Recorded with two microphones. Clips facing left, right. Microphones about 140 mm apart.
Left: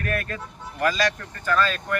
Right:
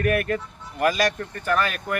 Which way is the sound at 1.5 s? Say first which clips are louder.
Left 1 dB; 20° right (ahead or behind).